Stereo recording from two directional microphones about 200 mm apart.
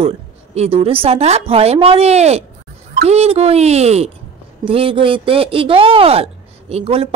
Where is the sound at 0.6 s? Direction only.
30° right (ahead or behind).